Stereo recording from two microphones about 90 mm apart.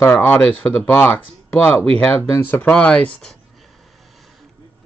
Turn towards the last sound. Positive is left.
turn(degrees=15)  # may be behind; listen again after turning